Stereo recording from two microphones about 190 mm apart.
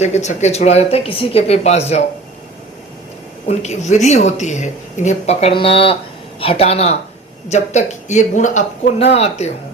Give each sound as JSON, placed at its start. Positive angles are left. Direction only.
{"t": 0.0, "sound": "speech", "side_deg": 35}
{"t": 3.4, "sound": "speech", "side_deg": 35}